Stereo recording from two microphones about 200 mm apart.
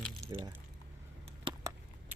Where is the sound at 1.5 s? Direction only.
25° right (ahead or behind).